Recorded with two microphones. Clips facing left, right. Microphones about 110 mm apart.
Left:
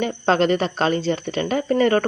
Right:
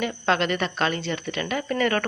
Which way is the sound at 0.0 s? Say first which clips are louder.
Left 5 dB; 35° left (ahead or behind).